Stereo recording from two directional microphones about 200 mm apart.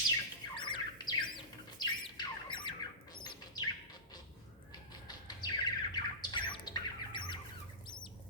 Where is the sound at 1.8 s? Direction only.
20° left (ahead or behind).